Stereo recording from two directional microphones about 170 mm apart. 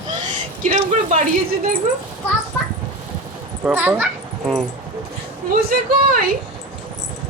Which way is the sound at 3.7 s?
10° right (ahead or behind).